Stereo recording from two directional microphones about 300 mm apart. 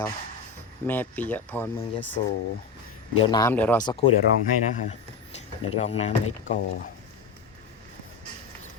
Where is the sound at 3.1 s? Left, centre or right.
Centre.